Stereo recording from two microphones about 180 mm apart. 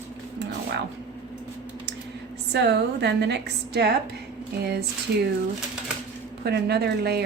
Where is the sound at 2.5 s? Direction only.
70° right (ahead or behind).